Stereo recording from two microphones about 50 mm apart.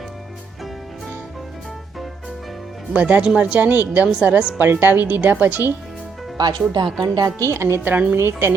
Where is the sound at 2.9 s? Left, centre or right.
Right.